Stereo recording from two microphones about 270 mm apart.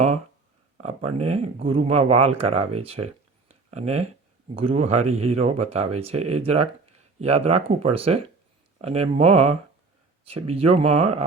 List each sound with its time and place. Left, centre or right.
0.8 s speech: right
3.5 s a sound: right
4.5 s speech: right